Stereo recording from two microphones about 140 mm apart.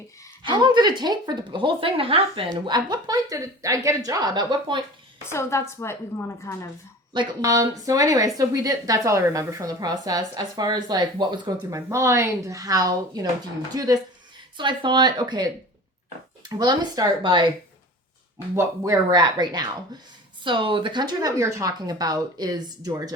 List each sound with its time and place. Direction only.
0.4 s a woman's voice: 35° right (ahead or behind)
5.3 s a woman's voice: 20° left (ahead or behind)
7.1 s a woman's voice: 30° right (ahead or behind)
18.5 s a woman's voice: 20° right (ahead or behind)